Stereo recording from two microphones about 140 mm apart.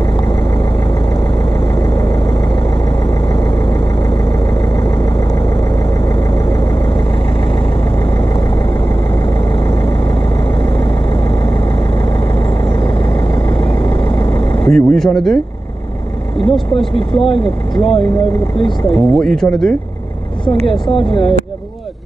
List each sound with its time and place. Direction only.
13.6 s vehicle: 40° left (ahead or behind)
14.7 s speech: 5° left (ahead or behind)
17.2 s speech: 40° left (ahead or behind)
18.9 s speech: centre (ahead or behind)
20.8 s speech: 40° left (ahead or behind)